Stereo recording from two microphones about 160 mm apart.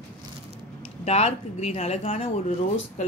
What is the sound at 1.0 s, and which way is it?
Speech, 40° left (ahead or behind).